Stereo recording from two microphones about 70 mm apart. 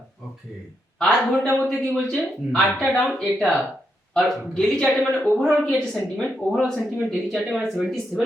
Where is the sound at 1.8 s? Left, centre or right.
Centre.